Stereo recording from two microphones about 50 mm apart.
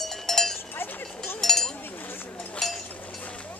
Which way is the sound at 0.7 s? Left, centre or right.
Left.